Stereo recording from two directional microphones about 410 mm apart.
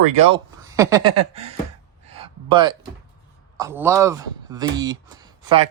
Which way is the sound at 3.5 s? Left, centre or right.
Centre.